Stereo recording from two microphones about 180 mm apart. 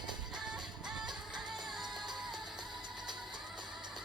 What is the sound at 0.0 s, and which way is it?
Music, 25° right (ahead or behind).